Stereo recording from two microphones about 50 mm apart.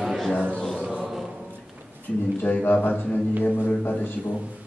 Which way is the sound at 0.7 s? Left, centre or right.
Right.